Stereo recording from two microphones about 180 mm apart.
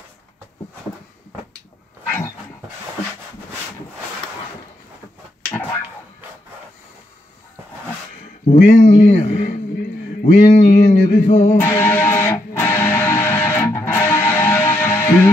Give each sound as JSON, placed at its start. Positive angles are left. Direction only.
{"t": 2.0, "sound": "dog", "side_deg": 10}
{"t": 8.5, "sound": "speech", "side_deg": 45}
{"t": 9.8, "sound": "a sound", "side_deg": 50}
{"t": 11.6, "sound": "music", "side_deg": 10}